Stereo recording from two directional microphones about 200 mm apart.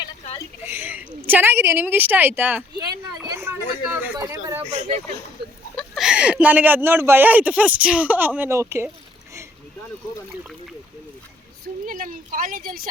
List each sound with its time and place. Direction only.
0.6 s a woman's voice: 10° right (ahead or behind)
4.7 s speech: 25° right (ahead or behind)
5.7 s speech: centre (ahead or behind)
11.9 s speech: 45° right (ahead or behind)